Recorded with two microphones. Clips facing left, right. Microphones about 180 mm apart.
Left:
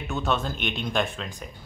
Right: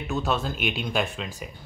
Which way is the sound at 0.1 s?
Centre (ahead or behind).